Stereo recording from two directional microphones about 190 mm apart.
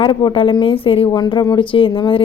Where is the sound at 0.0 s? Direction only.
25° left (ahead or behind).